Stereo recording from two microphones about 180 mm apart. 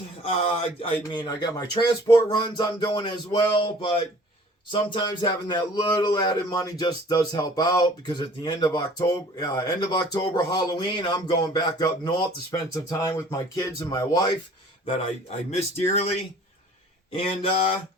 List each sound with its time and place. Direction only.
0.2 s speech: 30° left (ahead or behind)
14.8 s speech: 35° left (ahead or behind)